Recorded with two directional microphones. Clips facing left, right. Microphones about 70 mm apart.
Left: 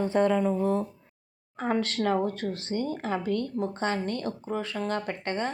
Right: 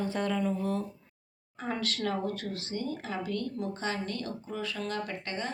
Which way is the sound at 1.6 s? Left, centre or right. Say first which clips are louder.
Left 6 dB; left.